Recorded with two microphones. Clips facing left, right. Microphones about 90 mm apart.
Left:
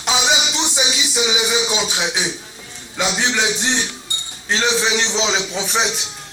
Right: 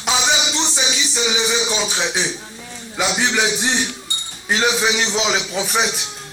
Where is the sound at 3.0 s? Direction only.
15° right (ahead or behind).